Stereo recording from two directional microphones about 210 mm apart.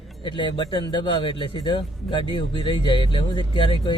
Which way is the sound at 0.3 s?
20° left (ahead or behind).